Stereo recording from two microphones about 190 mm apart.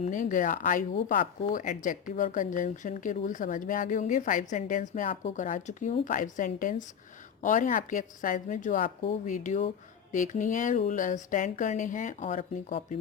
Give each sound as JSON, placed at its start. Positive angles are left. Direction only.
{"t": 0.0, "sound": "speech", "side_deg": 45}